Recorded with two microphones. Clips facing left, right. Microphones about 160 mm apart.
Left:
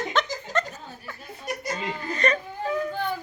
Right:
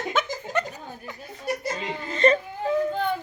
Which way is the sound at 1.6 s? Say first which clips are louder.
Even; 25° right (ahead or behind).